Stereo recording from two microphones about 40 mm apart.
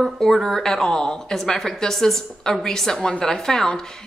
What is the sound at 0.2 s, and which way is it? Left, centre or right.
A woman's voice, centre.